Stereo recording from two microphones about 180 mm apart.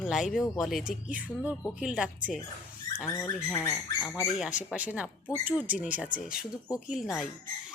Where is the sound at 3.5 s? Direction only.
15° left (ahead or behind).